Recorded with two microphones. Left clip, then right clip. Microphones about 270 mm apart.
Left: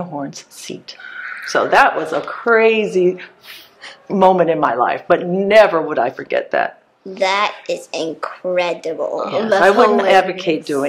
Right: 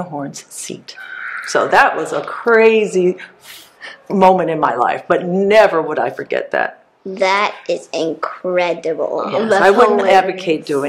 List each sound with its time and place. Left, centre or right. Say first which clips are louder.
0.1 s speech: right 1 dB; left
7.2 s speech: right 2 dB; right
9.2 s speech: even; centre
9.9 s speech: right 1 dB; left